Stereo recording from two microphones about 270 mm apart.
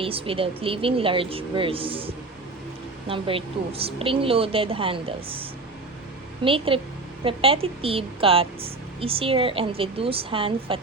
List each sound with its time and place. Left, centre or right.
0.0 s a woman's voice: centre
6.4 s a woman's voice: centre